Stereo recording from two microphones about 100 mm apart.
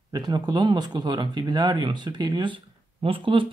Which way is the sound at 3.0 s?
60° right (ahead or behind).